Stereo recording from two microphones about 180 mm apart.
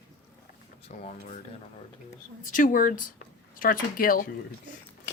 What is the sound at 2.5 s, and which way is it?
A woman's voice, 50° left (ahead or behind).